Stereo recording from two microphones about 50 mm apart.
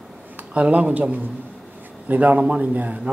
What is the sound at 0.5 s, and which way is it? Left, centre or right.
Gargling, right.